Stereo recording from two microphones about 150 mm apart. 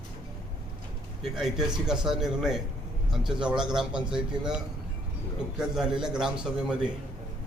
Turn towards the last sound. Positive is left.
turn(degrees=-5)  # may be behind; listen again after turning